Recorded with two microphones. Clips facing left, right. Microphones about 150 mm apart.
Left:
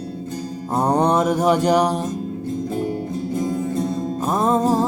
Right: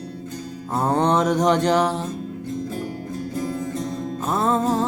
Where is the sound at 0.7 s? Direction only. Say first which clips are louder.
Left 2 dB; 15° left (ahead or behind).